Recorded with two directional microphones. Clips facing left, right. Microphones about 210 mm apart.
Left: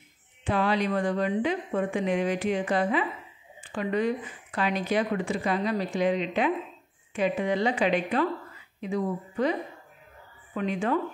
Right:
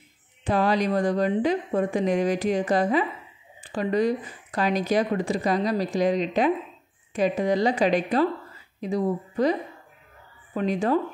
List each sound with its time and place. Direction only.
0.4 s speech: 40° right (ahead or behind)